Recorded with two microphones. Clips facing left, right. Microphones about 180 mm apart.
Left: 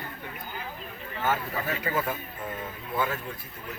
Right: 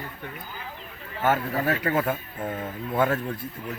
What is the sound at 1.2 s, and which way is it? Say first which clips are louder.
Speech: right 6 dB; 65° right (ahead or behind).